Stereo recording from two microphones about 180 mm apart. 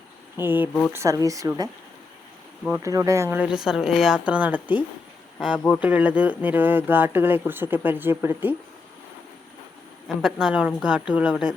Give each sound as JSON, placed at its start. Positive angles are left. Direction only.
{"t": 0.3, "sound": "speech", "side_deg": -10}
{"t": 2.8, "sound": "a woman's voice", "side_deg": -20}
{"t": 5.8, "sound": "speech", "side_deg": -10}
{"t": 10.2, "sound": "a woman's voice", "side_deg": -5}